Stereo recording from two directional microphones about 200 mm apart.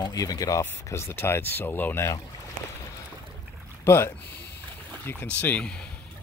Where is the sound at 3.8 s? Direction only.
10° left (ahead or behind).